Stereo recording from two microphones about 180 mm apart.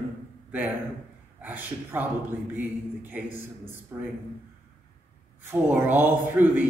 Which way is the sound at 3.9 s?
15° right (ahead or behind).